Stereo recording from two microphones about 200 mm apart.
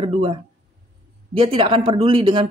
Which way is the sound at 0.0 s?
25° right (ahead or behind).